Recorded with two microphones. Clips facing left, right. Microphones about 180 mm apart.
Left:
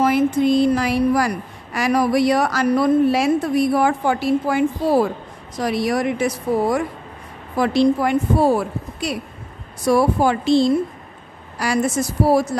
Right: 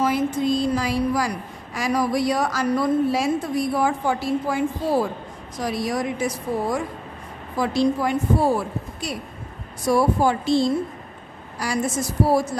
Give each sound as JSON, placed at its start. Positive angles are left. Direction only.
{"t": 0.0, "sound": "speech", "side_deg": 65}